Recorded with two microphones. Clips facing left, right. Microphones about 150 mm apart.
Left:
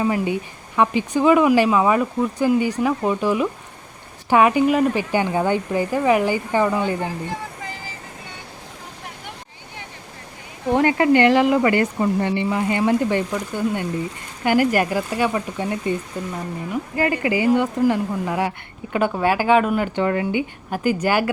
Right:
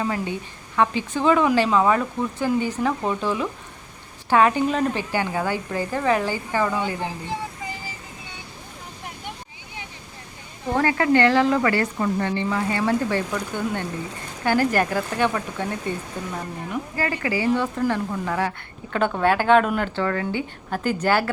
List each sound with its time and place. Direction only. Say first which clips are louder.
0.0 s speech: left 5 dB; 15° left (ahead or behind)
10.8 s speech: left 3 dB; 20° left (ahead or behind)
17.0 s speech: left 5 dB; 20° left (ahead or behind)
20.0 s speech: left 4 dB; 20° left (ahead or behind)